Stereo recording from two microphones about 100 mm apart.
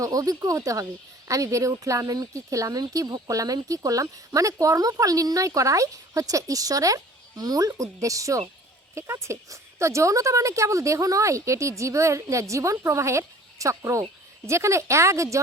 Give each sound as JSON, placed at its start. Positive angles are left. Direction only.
{"t": 0.0, "sound": "speech", "side_deg": -35}